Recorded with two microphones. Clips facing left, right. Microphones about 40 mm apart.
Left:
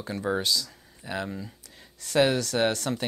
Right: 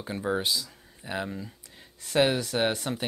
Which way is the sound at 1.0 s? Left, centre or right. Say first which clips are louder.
Even; centre.